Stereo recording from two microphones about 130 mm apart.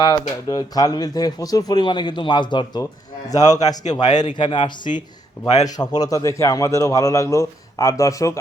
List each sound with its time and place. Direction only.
0.0 s a man's voice: 35° left (ahead or behind)